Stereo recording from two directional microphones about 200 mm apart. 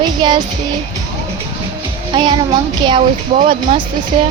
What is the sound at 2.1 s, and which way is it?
Speech, 20° right (ahead or behind).